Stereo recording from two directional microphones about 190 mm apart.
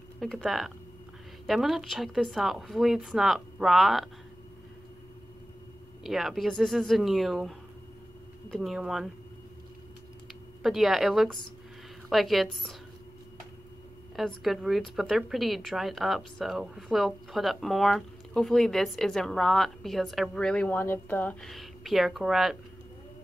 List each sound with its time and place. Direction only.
0.2 s a woman's voice: centre (ahead or behind)
6.0 s a woman's voice: centre (ahead or behind)
10.6 s a woman's voice: centre (ahead or behind)
14.1 s a woman's voice: centre (ahead or behind)